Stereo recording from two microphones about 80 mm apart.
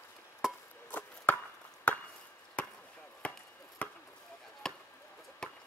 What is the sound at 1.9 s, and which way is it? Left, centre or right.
Chop, centre.